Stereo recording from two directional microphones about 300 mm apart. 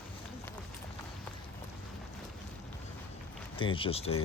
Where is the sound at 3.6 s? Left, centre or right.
Centre.